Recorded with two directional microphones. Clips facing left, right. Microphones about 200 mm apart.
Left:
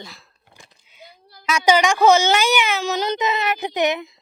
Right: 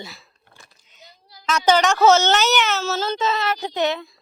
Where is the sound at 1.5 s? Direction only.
10° left (ahead or behind).